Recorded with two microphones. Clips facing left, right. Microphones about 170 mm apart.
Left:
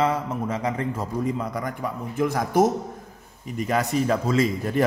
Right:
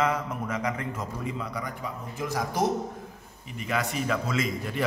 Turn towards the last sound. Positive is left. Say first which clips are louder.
# left 7 dB
turn(degrees=40)  # may be behind; listen again after turning